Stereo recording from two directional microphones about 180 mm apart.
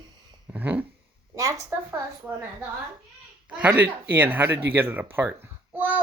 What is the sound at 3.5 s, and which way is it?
Speech, 10° right (ahead or behind).